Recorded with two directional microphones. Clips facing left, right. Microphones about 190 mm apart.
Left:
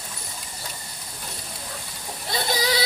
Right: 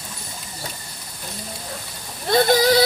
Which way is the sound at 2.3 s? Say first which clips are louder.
Right 10 dB; 55° right (ahead or behind).